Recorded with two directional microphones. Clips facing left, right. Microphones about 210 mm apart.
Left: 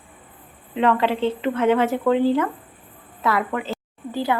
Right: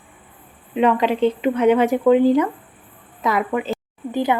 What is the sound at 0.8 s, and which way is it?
A woman's voice, 15° right (ahead or behind).